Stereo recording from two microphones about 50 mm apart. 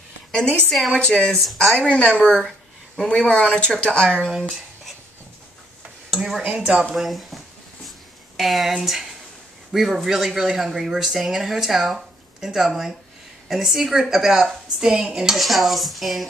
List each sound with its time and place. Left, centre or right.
0.7 s speech: centre
0.9 s speech: left
1.3 s speech: centre
1.8 s speech: left
4.3 s speech: centre
6.4 s speech: right
6.9 s speech: centre